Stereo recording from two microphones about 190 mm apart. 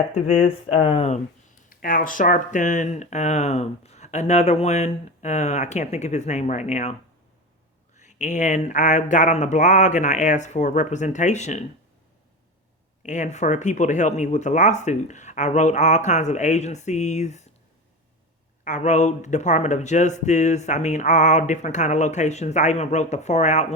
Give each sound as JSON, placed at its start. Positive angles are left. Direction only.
{"t": 0.8, "sound": "speech", "side_deg": 35}
{"t": 1.7, "sound": "speech", "side_deg": 45}
{"t": 8.0, "sound": "speech", "side_deg": 40}
{"t": 13.0, "sound": "speech", "side_deg": 40}
{"t": 18.6, "sound": "speech", "side_deg": 40}